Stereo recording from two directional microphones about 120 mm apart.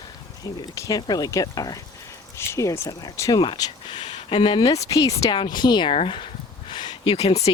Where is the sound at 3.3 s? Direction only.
40° left (ahead or behind).